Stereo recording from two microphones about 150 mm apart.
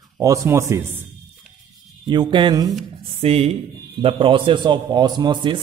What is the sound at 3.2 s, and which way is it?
A man's voice, 40° right (ahead or behind).